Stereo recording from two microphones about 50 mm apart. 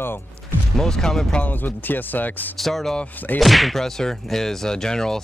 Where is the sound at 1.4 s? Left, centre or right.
Left.